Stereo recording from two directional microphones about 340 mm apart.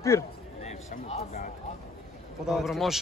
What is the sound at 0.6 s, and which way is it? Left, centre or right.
Speech, centre.